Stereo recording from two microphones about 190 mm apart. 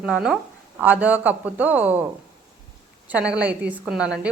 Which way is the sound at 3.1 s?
5° right (ahead or behind).